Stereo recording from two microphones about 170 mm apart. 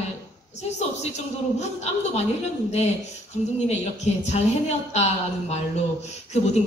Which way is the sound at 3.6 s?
40° left (ahead or behind).